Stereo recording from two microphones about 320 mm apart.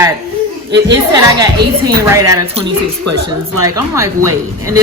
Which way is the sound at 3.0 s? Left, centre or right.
Right.